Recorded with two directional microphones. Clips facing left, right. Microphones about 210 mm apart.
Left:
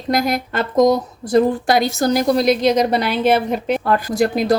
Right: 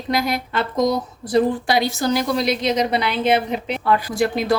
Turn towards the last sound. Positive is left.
turn(degrees=40)  # may be behind; listen again after turning